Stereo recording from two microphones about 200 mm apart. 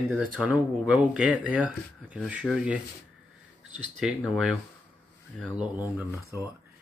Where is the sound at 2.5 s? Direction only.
5° left (ahead or behind).